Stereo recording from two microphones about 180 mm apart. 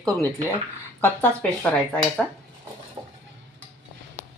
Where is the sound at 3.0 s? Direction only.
20° right (ahead or behind).